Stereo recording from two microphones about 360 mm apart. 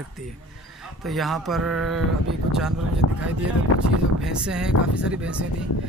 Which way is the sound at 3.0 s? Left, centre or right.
Left.